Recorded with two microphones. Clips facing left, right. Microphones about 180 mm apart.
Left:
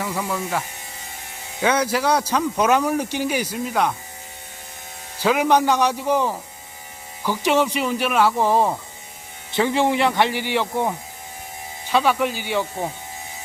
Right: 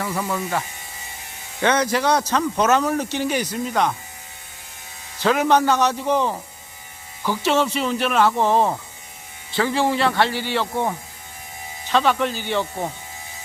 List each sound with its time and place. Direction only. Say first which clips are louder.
0.0 s speech: right 1 dB; 5° left (ahead or behind)
1.6 s speech: right 1 dB; 10° left (ahead or behind)
5.2 s speech: even; 10° left (ahead or behind)
9.5 s speech: left 1 dB; 20° left (ahead or behind)
11.9 s speech: even; 10° left (ahead or behind)